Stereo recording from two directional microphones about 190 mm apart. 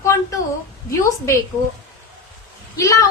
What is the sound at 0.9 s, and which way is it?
Speech, 15° left (ahead or behind).